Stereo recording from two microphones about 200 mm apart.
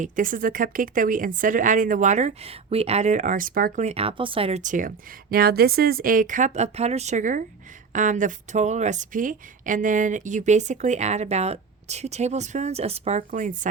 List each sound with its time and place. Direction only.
0.0 s speech: 40° right (ahead or behind)